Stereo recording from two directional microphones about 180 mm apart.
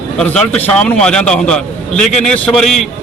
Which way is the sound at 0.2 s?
5° left (ahead or behind).